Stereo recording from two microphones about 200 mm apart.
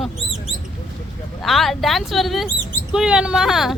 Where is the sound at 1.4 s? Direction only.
Centre (ahead or behind).